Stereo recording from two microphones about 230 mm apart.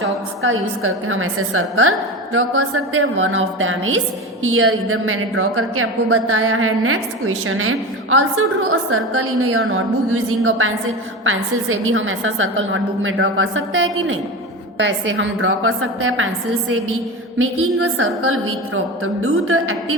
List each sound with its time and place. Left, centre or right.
0.4 s a woman's voice: right